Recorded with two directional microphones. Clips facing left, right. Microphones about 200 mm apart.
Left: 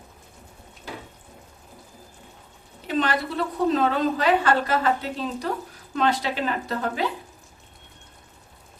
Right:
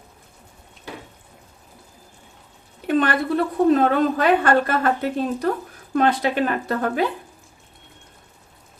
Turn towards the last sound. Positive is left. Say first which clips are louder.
# right 5 dB
turn(degrees=-55)  # may be behind; listen again after turning